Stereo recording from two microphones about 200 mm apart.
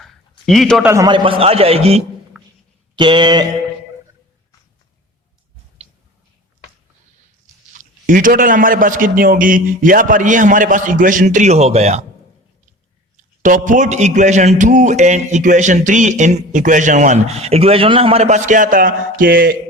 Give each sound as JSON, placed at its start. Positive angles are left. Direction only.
{"t": 0.0, "sound": "a sound", "side_deg": 0}
{"t": 0.9, "sound": "a man's voice", "side_deg": -20}
{"t": 2.3, "sound": "a sound", "side_deg": 0}
{"t": 2.9, "sound": "a man's voice", "side_deg": -25}
{"t": 7.4, "sound": "a man's voice", "side_deg": -40}
{"t": 13.1, "sound": "a man's voice", "side_deg": -40}